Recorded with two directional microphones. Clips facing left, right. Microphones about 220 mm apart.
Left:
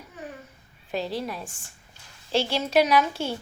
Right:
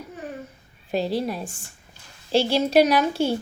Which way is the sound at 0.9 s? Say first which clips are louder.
Right 5 dB; 35° right (ahead or behind).